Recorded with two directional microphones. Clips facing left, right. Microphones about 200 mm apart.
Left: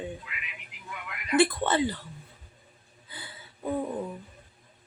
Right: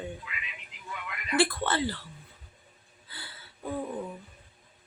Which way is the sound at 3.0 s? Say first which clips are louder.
Left 2 dB; 20° left (ahead or behind).